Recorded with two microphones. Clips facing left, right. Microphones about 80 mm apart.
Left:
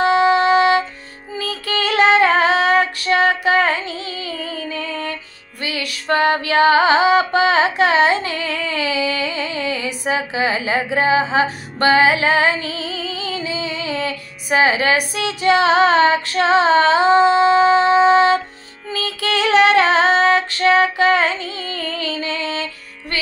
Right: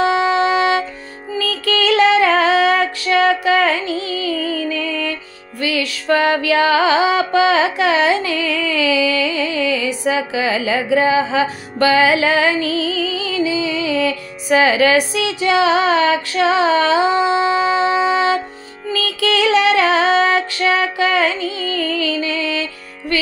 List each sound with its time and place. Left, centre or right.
0.1 s music: left
10.0 s a woman's voice: left
11.8 s music: left
17.4 s a woman's voice: left
17.9 s music: left